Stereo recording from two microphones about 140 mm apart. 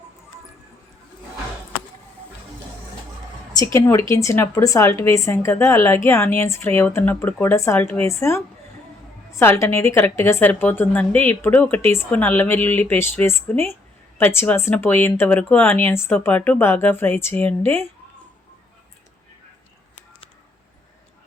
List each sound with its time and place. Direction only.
3.6 s a woman's voice: 20° left (ahead or behind)